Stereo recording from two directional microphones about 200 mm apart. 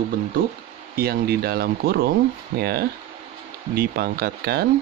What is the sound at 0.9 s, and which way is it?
Speech, 50° right (ahead or behind).